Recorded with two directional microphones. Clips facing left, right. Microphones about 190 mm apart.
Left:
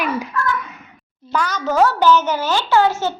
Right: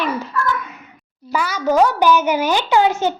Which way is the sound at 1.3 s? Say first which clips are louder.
Right 2 dB; 10° right (ahead or behind).